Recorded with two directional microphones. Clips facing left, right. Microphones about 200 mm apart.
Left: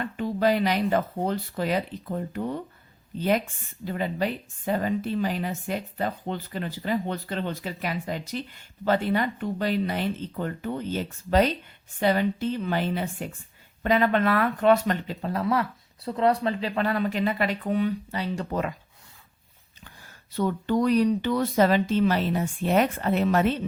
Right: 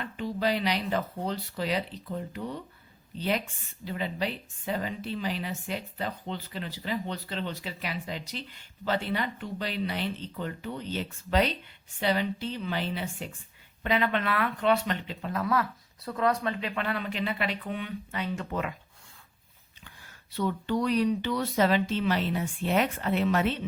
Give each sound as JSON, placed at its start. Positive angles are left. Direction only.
{"t": 0.0, "sound": "speech", "side_deg": 50}
{"t": 20.3, "sound": "speech", "side_deg": 45}